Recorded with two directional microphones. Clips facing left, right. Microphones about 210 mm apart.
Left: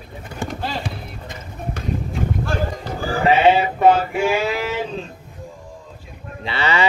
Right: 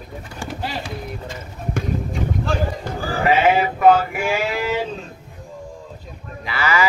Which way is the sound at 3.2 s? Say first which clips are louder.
Left 2 dB; 25° left (ahead or behind).